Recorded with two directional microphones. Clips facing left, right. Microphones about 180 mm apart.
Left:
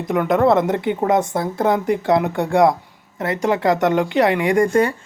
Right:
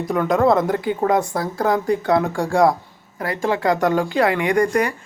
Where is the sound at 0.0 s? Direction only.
20° left (ahead or behind).